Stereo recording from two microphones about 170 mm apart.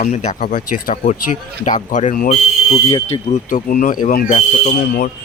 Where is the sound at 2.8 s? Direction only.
25° left (ahead or behind).